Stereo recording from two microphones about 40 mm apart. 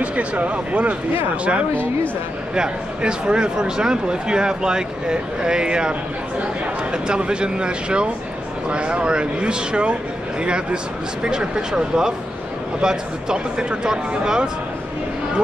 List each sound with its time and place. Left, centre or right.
0.0 s speech: right; by 14.5 s centre